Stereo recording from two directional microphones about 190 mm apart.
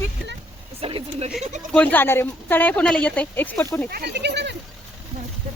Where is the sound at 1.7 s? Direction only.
10° left (ahead or behind).